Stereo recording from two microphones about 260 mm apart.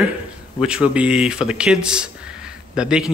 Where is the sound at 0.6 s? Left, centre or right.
Centre.